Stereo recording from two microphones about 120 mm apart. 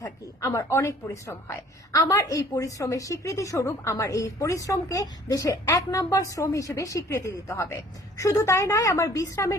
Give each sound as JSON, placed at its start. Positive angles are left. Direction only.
{"t": 0.0, "sound": "a woman's voice", "side_deg": 25}